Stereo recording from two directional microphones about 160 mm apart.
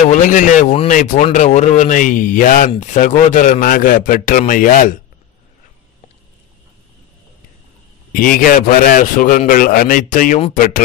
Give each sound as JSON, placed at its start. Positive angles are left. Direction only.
{"t": 0.0, "sound": "a man's voice", "side_deg": 55}
{"t": 8.1, "sound": "a man's voice", "side_deg": 60}